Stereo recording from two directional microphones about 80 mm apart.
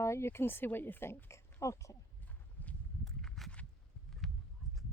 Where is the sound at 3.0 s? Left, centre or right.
Centre.